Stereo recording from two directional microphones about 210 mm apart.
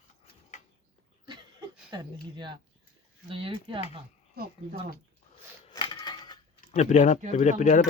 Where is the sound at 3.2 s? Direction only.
25° right (ahead or behind).